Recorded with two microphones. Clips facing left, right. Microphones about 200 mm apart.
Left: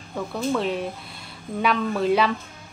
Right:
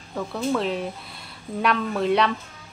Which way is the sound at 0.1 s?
Centre (ahead or behind).